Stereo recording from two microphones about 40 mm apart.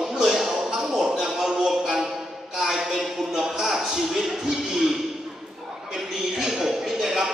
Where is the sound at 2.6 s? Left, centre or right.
Centre.